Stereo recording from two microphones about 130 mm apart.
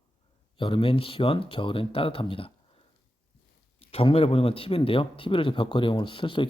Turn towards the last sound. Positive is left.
turn(degrees=40)  # may be behind; listen again after turning